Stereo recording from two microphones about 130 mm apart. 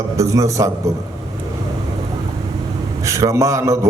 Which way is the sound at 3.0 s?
25° right (ahead or behind).